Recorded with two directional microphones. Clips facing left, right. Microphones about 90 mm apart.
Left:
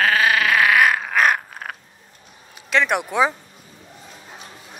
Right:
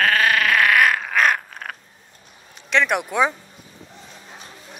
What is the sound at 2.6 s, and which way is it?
Speech, centre (ahead or behind).